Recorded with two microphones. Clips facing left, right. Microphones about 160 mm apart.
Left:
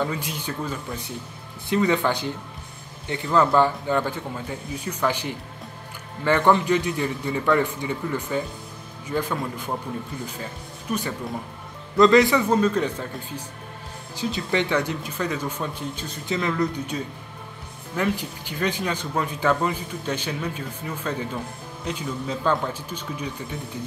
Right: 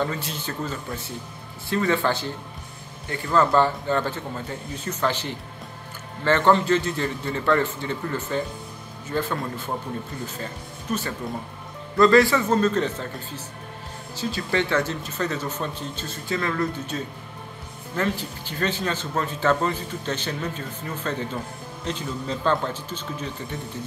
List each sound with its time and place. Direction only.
0.0 s speech: 10° left (ahead or behind)
3.3 s speech: 15° left (ahead or behind)
10.9 s speech: 15° left (ahead or behind)
14.1 s speech: 15° left (ahead or behind)